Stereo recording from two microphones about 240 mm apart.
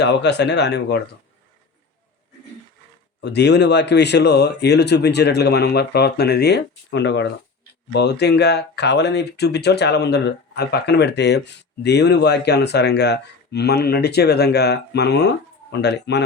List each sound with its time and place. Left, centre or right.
0.0 s speech: left
3.2 s speech: left